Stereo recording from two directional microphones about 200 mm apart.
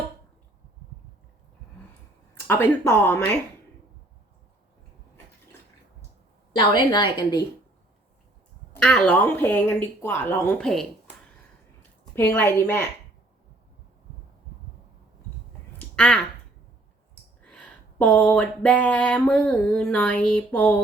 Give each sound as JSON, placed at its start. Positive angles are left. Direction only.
{"t": 2.5, "sound": "speech", "side_deg": 10}
{"t": 6.6, "sound": "a woman's voice", "side_deg": 20}
{"t": 8.8, "sound": "speech", "side_deg": 5}
{"t": 12.1, "sound": "speech", "side_deg": 10}
{"t": 16.0, "sound": "speech", "side_deg": 5}
{"t": 17.4, "sound": "a sound", "side_deg": 5}